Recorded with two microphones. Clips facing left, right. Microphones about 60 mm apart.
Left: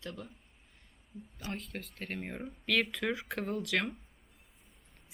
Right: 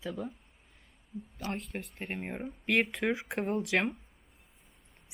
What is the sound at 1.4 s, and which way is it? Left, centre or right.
Speech, right.